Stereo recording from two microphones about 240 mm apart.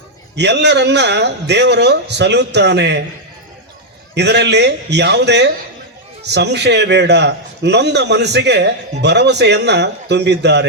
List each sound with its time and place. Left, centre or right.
0.3 s a man's voice: right
4.1 s a man's voice: right